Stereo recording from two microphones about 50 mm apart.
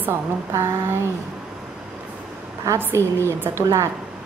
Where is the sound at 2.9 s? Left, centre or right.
Right.